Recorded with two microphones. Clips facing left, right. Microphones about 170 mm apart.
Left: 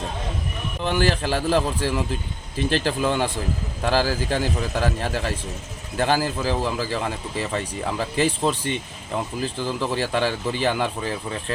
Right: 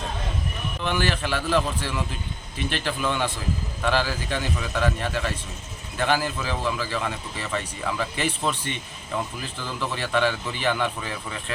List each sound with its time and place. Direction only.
0.9 s speech: 35° left (ahead or behind)